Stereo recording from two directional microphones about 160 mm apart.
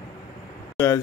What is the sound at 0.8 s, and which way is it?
Speech, 15° left (ahead or behind).